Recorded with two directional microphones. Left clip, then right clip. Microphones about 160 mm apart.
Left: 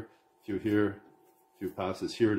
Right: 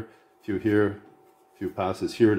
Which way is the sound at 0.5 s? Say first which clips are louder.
Right 6 dB; 40° right (ahead or behind).